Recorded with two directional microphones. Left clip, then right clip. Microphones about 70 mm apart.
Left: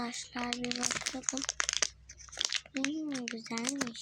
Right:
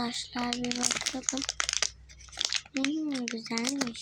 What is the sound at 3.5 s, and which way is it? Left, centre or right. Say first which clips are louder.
Speech: right 4 dB; left.